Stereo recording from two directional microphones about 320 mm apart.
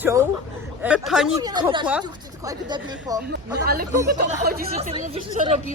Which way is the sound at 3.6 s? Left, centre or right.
Right.